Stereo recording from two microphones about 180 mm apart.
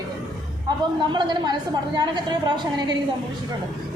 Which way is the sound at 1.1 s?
25° right (ahead or behind).